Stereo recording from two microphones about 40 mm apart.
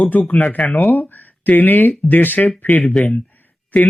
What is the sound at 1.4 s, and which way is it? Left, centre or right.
Speech, left.